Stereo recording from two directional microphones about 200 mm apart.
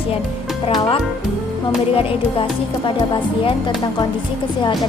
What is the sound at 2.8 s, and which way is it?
Speech, 25° left (ahead or behind).